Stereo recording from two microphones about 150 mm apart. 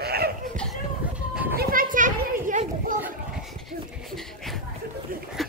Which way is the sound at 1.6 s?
70° right (ahead or behind).